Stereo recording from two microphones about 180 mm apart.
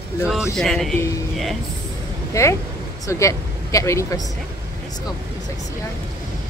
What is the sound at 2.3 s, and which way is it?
Speech, 15° left (ahead or behind).